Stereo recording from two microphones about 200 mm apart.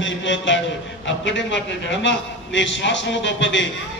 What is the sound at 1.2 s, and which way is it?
A man's voice, 65° left (ahead or behind).